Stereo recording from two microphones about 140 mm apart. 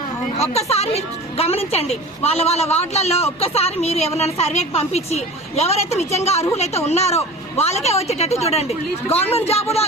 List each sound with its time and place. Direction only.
0.3 s a woman's voice: 50° left (ahead or behind)